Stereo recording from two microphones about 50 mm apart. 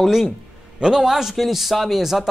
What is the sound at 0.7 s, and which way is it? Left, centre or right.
Speech, centre.